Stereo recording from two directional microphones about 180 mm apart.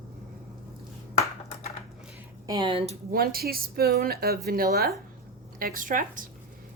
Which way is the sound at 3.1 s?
55° right (ahead or behind).